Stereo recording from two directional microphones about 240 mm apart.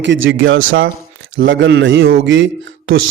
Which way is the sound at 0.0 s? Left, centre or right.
Right.